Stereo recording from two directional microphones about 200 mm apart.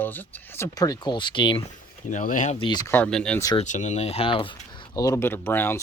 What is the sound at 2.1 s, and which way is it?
Speech, 40° left (ahead or behind).